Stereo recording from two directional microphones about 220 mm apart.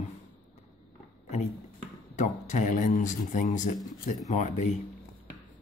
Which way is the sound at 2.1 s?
35° left (ahead or behind).